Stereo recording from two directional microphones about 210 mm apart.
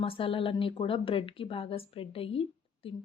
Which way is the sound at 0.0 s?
25° left (ahead or behind).